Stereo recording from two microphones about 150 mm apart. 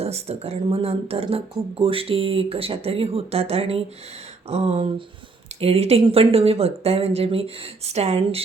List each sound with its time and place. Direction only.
0.0 s speech: 45° right (ahead or behind)